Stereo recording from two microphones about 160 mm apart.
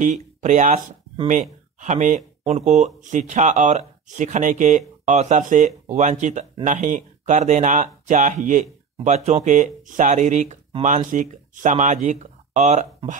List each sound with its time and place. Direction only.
0.0 s speech: 50° right (ahead or behind)